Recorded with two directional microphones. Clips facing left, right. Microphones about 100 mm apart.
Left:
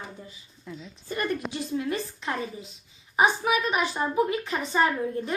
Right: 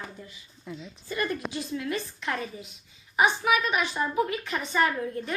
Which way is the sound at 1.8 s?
30° left (ahead or behind).